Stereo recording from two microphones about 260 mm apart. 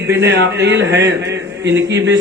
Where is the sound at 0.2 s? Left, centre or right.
Right.